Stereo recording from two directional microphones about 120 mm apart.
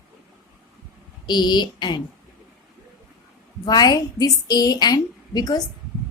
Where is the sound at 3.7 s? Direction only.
35° left (ahead or behind).